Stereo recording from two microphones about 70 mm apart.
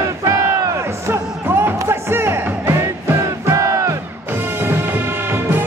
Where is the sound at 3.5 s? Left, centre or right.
Right.